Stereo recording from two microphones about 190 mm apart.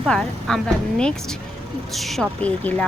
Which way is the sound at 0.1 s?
5° left (ahead or behind).